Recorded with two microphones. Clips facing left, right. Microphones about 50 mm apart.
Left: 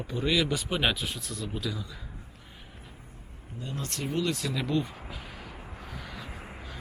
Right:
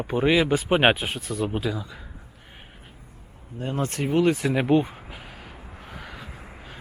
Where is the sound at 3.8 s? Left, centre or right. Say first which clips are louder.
Right 9 dB; right.